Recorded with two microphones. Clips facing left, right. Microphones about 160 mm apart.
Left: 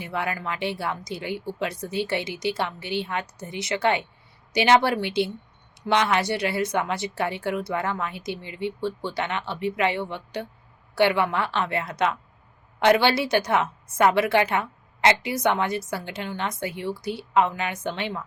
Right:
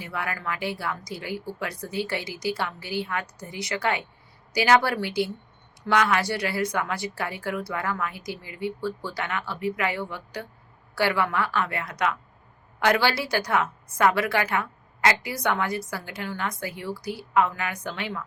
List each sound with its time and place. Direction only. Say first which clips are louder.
0.0 s a woman's voice: left 3 dB; 25° left (ahead or behind)